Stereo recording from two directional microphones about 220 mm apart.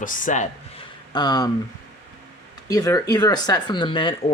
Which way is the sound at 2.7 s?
15° left (ahead or behind).